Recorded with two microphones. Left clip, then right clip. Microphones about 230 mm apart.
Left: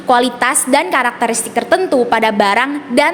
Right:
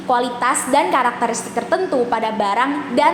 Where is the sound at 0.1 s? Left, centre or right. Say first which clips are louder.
Left 5 dB; left.